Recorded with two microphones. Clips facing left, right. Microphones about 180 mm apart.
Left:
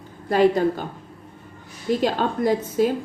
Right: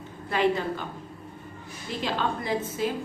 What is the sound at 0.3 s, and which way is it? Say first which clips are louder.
Speech: left 7 dB; 40° left (ahead or behind).